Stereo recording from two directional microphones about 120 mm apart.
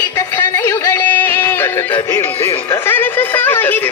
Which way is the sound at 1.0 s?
15° left (ahead or behind).